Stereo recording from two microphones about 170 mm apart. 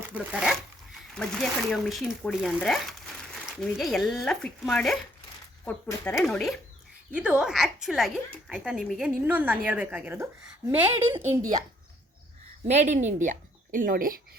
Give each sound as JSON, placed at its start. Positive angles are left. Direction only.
{"t": 0.1, "sound": "speech", "side_deg": -10}
{"t": 1.1, "sound": "a woman's voice", "side_deg": 5}
{"t": 12.6, "sound": "a woman's voice", "side_deg": -40}